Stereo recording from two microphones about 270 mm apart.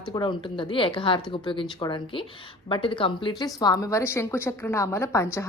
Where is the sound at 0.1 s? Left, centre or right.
Centre.